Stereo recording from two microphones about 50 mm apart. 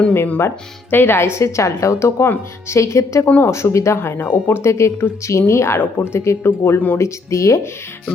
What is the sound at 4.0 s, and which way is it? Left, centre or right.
A woman's voice, left.